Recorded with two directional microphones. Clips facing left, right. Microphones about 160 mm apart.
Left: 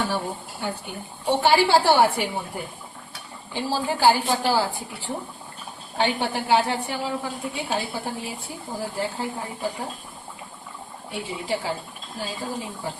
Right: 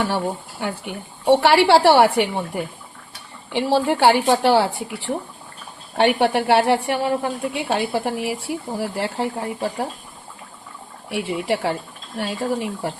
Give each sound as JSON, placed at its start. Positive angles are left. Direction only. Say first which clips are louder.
{"t": 0.6, "sound": "a woman's voice", "louder": "right 4 dB", "side_deg": -75}
{"t": 3.5, "sound": "a woman's voice", "louder": "right 7 dB", "side_deg": -70}
{"t": 11.1, "sound": "a woman's voice", "louder": "right 6 dB", "side_deg": -75}